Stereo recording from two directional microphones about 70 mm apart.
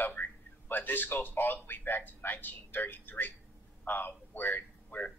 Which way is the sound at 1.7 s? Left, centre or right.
Left.